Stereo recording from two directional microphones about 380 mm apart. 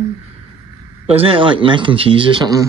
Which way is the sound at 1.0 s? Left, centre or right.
Centre.